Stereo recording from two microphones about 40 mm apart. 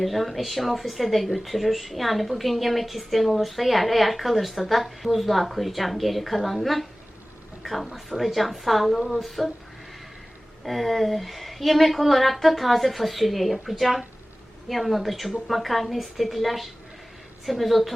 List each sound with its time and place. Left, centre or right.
0.0 s speech: centre
10.6 s speech: centre